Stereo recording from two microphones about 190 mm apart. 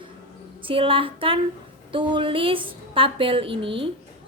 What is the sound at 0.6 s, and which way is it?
A woman's voice, 30° right (ahead or behind).